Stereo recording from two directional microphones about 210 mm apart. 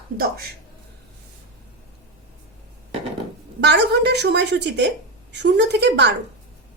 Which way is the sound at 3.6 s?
55° right (ahead or behind).